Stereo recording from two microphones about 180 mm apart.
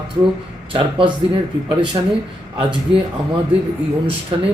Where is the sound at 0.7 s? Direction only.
30° right (ahead or behind).